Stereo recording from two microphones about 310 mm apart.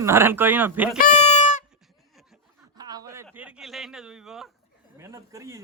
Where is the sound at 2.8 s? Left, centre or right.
Centre.